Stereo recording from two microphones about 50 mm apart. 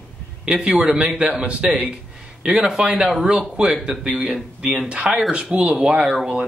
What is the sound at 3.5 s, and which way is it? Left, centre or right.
Speech, right.